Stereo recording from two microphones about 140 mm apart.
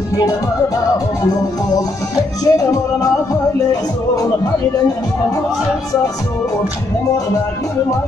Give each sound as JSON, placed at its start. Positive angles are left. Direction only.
{"t": 2.5, "sound": "music", "side_deg": 25}